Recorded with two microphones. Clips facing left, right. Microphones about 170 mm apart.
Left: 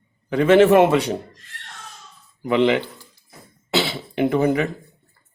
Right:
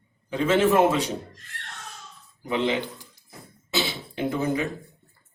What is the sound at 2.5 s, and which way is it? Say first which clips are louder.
Speech: left 7 dB; 70° left (ahead or behind).